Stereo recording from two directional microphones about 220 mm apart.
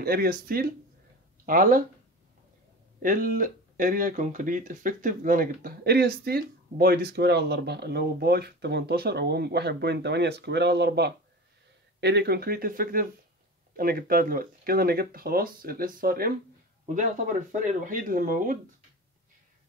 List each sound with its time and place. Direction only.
0.0 s speech: 45° right (ahead or behind)
3.0 s speech: 40° right (ahead or behind)